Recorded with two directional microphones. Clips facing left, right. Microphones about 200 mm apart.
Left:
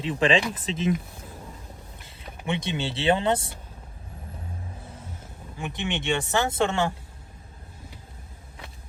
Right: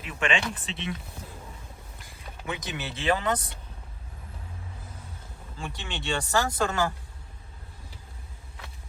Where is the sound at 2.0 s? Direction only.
25° left (ahead or behind).